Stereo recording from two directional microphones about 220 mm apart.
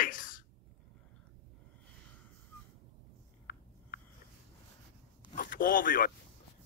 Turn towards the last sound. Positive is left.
turn(degrees=40)  # may be behind; listen again after turning